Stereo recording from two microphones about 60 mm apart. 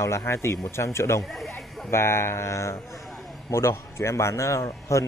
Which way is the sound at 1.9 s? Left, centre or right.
Left.